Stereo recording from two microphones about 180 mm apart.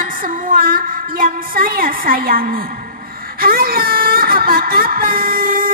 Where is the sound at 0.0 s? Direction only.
50° right (ahead or behind).